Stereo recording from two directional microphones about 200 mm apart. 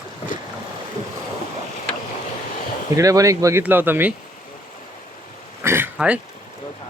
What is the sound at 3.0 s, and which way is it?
Speech, 15° right (ahead or behind).